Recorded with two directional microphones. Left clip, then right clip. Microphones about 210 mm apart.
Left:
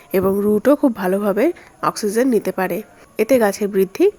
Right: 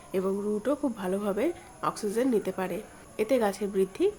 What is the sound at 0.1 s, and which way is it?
A woman's voice, 45° left (ahead or behind).